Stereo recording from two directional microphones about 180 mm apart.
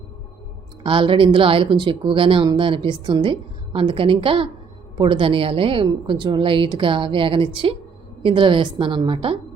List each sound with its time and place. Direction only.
0.8 s speech: 30° right (ahead or behind)